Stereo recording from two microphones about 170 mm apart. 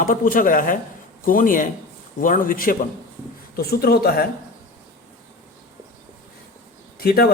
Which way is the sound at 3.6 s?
65° left (ahead or behind).